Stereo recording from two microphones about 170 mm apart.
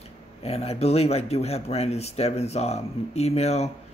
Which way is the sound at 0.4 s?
35° left (ahead or behind).